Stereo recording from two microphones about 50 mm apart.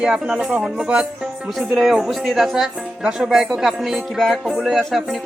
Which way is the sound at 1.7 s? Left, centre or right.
Centre.